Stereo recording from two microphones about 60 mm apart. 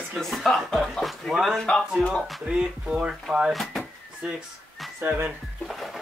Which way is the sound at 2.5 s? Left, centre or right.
Centre.